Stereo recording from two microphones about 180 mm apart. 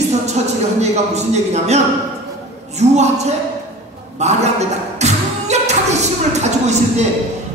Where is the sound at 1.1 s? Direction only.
40° right (ahead or behind).